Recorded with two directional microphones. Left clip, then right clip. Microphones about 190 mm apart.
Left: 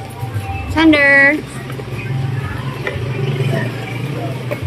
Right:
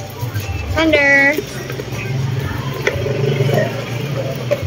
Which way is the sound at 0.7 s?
30° left (ahead or behind).